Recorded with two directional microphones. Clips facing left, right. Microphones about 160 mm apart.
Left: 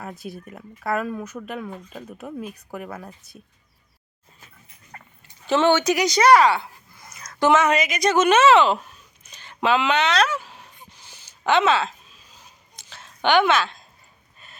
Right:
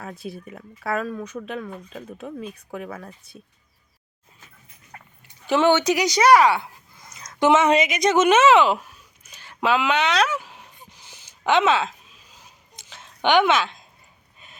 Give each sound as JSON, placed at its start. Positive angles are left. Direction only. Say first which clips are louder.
{"t": 0.0, "sound": "speech", "louder": "even", "side_deg": 0}
{"t": 4.9, "sound": "dog", "louder": "left 1 dB", "side_deg": -5}
{"t": 5.5, "sound": "speech", "louder": "even", "side_deg": -15}
{"t": 7.1, "sound": "a sound", "louder": "right 1 dB", "side_deg": -20}